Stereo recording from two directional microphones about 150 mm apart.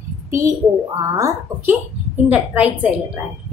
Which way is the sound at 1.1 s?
15° right (ahead or behind).